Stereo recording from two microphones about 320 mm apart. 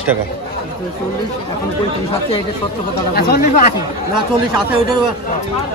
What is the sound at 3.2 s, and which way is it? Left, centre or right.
Speech, left.